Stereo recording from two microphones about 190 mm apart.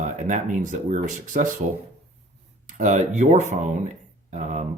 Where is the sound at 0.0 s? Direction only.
40° right (ahead or behind).